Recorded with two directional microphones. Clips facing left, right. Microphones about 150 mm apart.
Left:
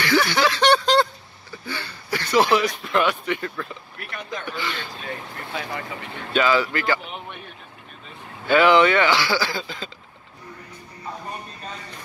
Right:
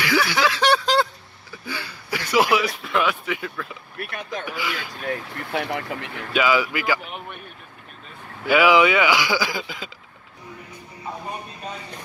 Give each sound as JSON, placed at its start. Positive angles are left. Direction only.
{"t": 0.0, "sound": "a sound", "side_deg": -5}
{"t": 1.7, "sound": "speech", "side_deg": -5}
{"t": 5.0, "sound": "speech", "side_deg": -65}
{"t": 6.3, "sound": "speech", "side_deg": -10}
{"t": 8.5, "sound": "speech", "side_deg": -5}
{"t": 11.1, "sound": "a sound", "side_deg": -10}